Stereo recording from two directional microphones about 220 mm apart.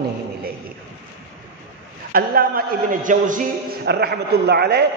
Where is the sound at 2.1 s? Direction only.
40° right (ahead or behind).